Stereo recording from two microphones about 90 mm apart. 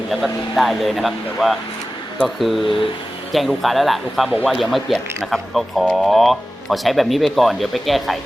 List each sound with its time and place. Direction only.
0.1 s speech: centre (ahead or behind)